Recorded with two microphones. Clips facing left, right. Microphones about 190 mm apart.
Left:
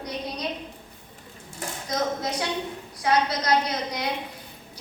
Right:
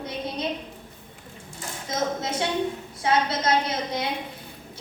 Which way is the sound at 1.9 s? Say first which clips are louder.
Even; 25° right (ahead or behind).